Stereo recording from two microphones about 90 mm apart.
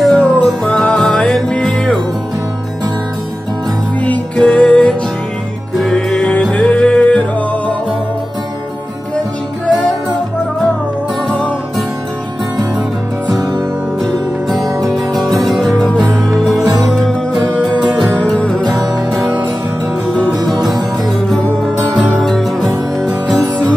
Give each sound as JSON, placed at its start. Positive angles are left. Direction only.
{"t": 0.0, "sound": "music", "side_deg": 10}
{"t": 4.0, "sound": "music", "side_deg": 15}
{"t": 11.2, "sound": "music", "side_deg": 10}
{"t": 14.9, "sound": "music", "side_deg": 5}
{"t": 18.1, "sound": "music", "side_deg": 15}
{"t": 21.4, "sound": "music", "side_deg": 15}
{"t": 21.9, "sound": "music", "side_deg": 5}